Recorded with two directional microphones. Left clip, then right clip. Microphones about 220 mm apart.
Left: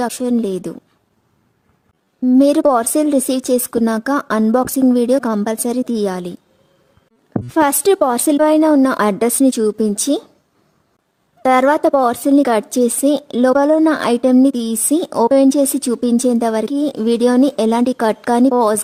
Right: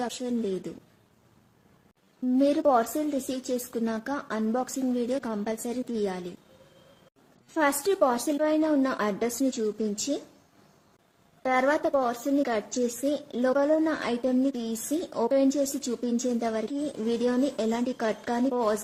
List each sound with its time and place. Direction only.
0.0 s speech: 50° left (ahead or behind)
2.2 s speech: 50° left (ahead or behind)
7.5 s speech: 50° left (ahead or behind)
11.4 s speech: 50° left (ahead or behind)